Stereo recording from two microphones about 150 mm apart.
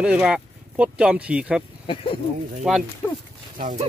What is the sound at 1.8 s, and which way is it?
Speech, 35° left (ahead or behind).